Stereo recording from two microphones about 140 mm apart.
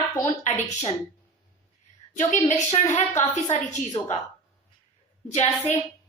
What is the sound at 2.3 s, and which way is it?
Speech, 60° left (ahead or behind).